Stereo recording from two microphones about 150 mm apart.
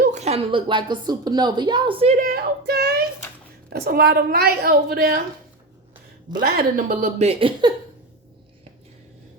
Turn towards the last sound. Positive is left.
turn(degrees=-35)  # may be behind; listen again after turning